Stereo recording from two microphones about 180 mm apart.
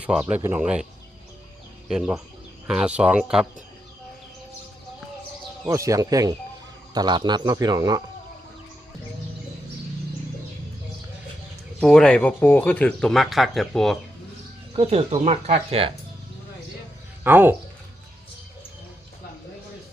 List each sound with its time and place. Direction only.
0.0 s speech: 5° right (ahead or behind)
1.9 s speech: 5° right (ahead or behind)
5.6 s speech: 15° right (ahead or behind)
11.8 s speech: 5° left (ahead or behind)
14.8 s speech: 35° right (ahead or behind)
17.2 s speech: 10° right (ahead or behind)